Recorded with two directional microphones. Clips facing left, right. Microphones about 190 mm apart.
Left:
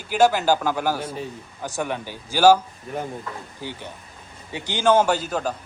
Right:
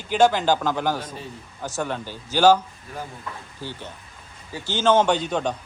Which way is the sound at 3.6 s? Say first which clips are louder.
Right 1 dB; 15° left (ahead or behind).